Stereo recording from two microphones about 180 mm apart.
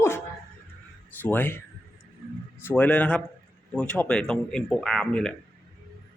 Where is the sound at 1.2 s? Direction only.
10° left (ahead or behind).